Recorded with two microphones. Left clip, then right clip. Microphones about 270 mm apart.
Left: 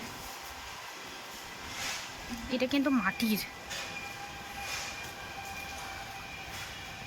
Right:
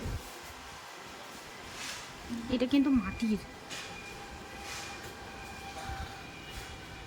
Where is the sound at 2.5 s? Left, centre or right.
Centre.